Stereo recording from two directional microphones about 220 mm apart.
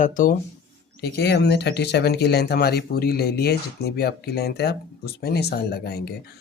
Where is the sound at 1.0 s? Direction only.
50° left (ahead or behind).